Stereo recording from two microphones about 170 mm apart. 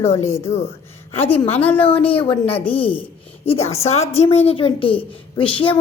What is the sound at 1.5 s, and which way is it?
A woman's voice, 10° left (ahead or behind).